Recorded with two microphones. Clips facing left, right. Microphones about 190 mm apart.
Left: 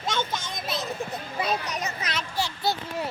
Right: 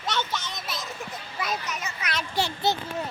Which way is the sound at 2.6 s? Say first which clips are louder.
Right 1 dB; 20° right (ahead or behind).